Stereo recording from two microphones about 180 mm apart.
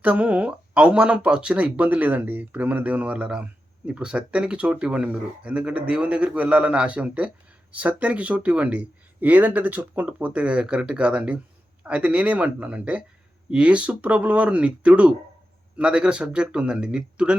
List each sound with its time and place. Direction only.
0.0 s speech: 5° right (ahead or behind)